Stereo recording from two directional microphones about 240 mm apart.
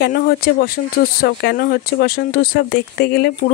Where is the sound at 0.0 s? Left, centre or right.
Left.